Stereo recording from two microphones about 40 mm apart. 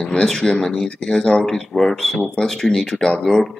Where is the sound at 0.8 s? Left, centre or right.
Left.